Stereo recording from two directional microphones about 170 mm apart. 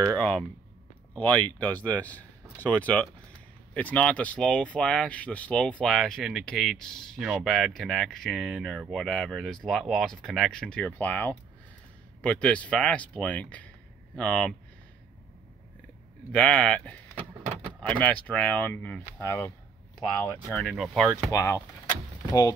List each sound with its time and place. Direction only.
0.2 s speech: 5° left (ahead or behind)
16.3 s speech: 5° left (ahead or behind)
20.4 s speech: centre (ahead or behind)
21.3 s speech: 15° left (ahead or behind)